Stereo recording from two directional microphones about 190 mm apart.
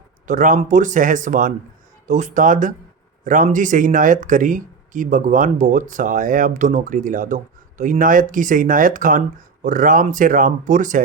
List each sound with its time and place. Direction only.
0.3 s speech: 40° right (ahead or behind)